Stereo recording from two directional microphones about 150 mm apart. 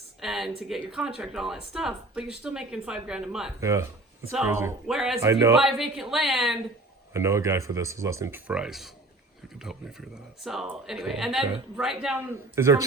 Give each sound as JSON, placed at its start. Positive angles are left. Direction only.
{"t": 0.2, "sound": "speech", "side_deg": -5}
{"t": 3.6, "sound": "speech", "side_deg": -20}
{"t": 4.9, "sound": "speech", "side_deg": 0}
{"t": 5.2, "sound": "speech", "side_deg": -20}
{"t": 5.5, "sound": "speech", "side_deg": 0}
{"t": 7.1, "sound": "speech", "side_deg": -20}
{"t": 8.4, "sound": "speech", "side_deg": -5}
{"t": 12.1, "sound": "speech", "side_deg": -20}